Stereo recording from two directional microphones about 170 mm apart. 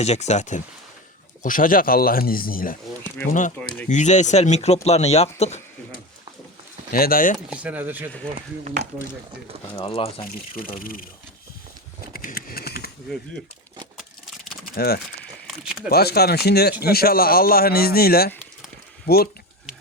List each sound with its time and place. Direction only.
0.0 s speech: 40° left (ahead or behind); by 2.7 s 55° left (ahead or behind)
3.6 s speech: 5° left (ahead or behind)
3.8 s speech: 45° left (ahead or behind)
6.9 s speech: 60° left (ahead or behind)
7.3 s speech: 5° right (ahead or behind)
9.8 s speech: 35° left (ahead or behind)
10.5 s speech: 55° left (ahead or behind)
12.1 s typing: 60° left (ahead or behind)
14.8 s speech: 70° left (ahead or behind)
15.4 s speech: centre (ahead or behind)
15.9 s speech: 65° left (ahead or behind)